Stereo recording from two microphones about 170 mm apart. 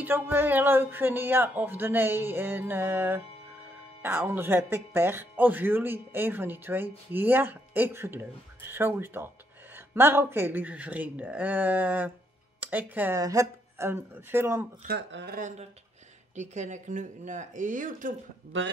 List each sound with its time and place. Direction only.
0.0 s speech: 10° right (ahead or behind)
14.9 s speech: 90° right
15.3 s speech: 45° right (ahead or behind)